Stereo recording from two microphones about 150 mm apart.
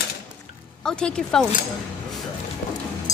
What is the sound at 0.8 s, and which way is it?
Speech, 5° left (ahead or behind).